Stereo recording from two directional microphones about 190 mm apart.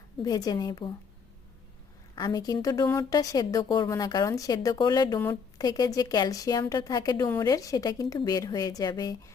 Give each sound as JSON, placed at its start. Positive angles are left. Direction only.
{"t": 0.2, "sound": "a woman's voice", "side_deg": 20}
{"t": 2.1, "sound": "a woman's voice", "side_deg": 20}